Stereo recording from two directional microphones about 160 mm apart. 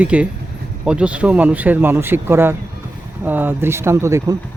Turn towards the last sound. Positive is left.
turn(degrees=-20)  # may be behind; listen again after turning